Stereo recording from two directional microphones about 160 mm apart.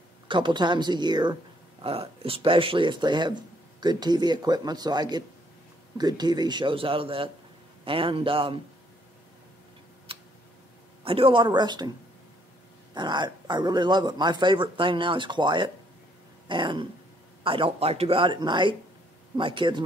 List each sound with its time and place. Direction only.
0.3 s speech: 30° right (ahead or behind)
10.1 s tick: 35° right (ahead or behind)
11.1 s speech: 35° right (ahead or behind)
12.9 s speech: 30° right (ahead or behind)
16.4 s a sound: 30° right (ahead or behind)
17.4 s speech: 35° right (ahead or behind)